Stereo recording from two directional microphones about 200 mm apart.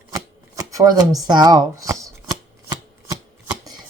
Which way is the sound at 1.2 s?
20° right (ahead or behind).